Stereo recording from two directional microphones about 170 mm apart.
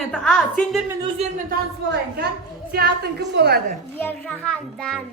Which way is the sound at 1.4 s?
70° right (ahead or behind).